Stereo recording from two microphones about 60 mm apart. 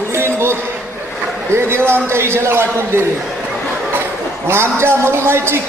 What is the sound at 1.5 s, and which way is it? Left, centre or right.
A man's voice, right.